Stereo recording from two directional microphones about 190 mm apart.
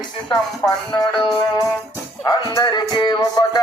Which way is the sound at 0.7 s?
20° left (ahead or behind).